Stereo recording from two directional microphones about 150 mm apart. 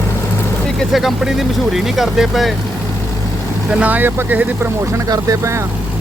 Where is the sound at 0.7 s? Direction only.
Centre (ahead or behind).